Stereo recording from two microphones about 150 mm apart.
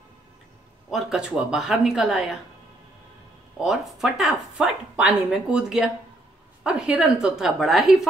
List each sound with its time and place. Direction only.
0.8 s a woman's voice: 5° right (ahead or behind)
3.5 s a woman's voice: centre (ahead or behind)